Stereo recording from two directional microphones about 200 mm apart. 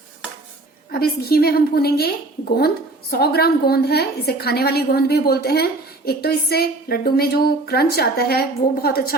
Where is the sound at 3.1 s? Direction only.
50° left (ahead or behind).